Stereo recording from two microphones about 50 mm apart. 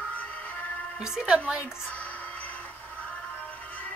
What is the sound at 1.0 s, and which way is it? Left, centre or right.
Speech, centre.